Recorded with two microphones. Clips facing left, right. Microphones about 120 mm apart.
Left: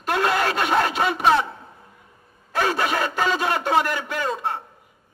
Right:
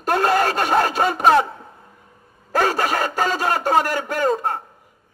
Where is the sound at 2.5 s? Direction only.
40° right (ahead or behind).